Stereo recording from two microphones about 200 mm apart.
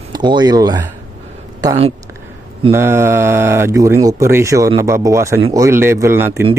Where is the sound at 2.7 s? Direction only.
10° right (ahead or behind).